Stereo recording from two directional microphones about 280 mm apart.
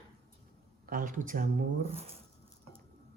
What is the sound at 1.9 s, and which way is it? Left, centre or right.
Speech, right.